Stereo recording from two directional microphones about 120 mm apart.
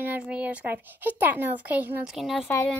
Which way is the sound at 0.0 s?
15° right (ahead or behind).